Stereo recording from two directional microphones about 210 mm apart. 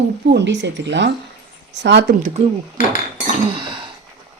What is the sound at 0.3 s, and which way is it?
Speech, 55° right (ahead or behind).